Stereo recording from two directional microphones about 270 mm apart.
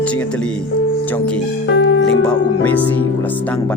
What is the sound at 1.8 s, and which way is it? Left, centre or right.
Music, left.